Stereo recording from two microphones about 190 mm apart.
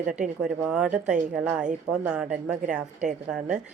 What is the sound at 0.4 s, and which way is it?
A woman's voice, 5° right (ahead or behind).